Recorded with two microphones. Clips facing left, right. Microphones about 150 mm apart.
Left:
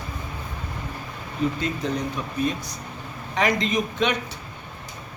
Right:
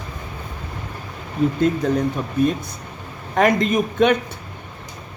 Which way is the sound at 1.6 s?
50° right (ahead or behind).